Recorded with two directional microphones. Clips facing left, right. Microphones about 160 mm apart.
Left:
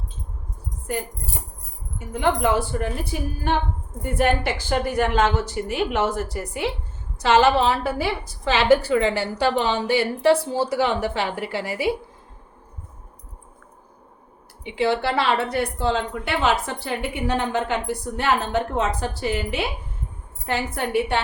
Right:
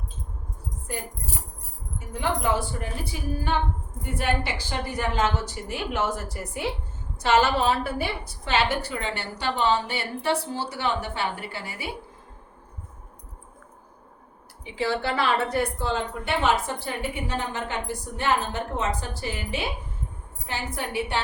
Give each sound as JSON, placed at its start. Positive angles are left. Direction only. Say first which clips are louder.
{"t": 2.2, "sound": "a woman's voice", "louder": "left 5 dB", "side_deg": 70}
{"t": 3.0, "sound": "a woman's voice", "louder": "left 3 dB", "side_deg": 60}
{"t": 14.6, "sound": "a woman's voice", "louder": "left 5 dB", "side_deg": 75}
{"t": 18.2, "sound": "a woman's voice", "louder": "left 3 dB", "side_deg": 70}